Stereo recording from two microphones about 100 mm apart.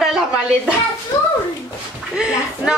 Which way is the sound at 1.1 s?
30° left (ahead or behind).